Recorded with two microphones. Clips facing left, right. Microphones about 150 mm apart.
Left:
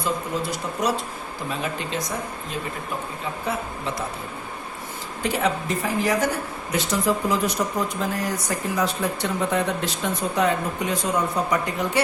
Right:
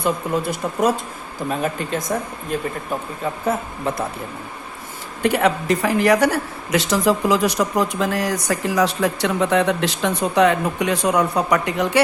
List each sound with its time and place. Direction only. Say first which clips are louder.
0.5 s speech: right 5 dB; 50° right (ahead or behind)
5.2 s speech: right 6 dB; 65° right (ahead or behind)